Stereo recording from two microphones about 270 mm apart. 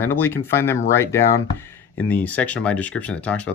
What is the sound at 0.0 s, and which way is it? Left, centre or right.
Speech, centre.